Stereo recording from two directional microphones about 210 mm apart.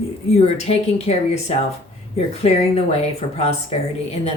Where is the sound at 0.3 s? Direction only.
30° left (ahead or behind).